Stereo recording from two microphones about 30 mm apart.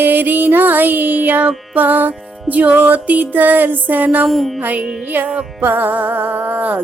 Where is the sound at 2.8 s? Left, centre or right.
Right.